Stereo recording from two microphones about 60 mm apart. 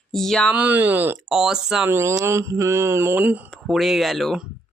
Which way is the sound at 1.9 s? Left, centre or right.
Right.